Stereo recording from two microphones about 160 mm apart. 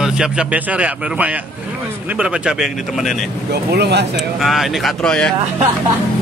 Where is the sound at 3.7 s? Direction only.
90° right.